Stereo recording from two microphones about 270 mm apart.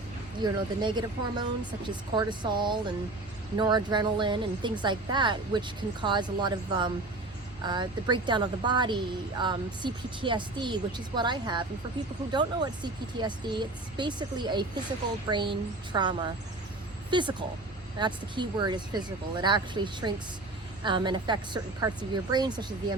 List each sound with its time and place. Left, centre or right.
0.4 s speech: centre